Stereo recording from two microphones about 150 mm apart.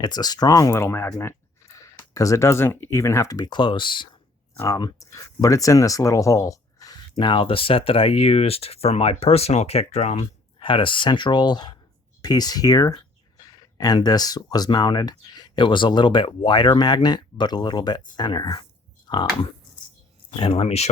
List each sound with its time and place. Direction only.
0.0 s speech: 25° left (ahead or behind)
4.5 s speech: 20° left (ahead or behind)
19.0 s a sound: 30° left (ahead or behind)
20.4 s speech: 40° left (ahead or behind)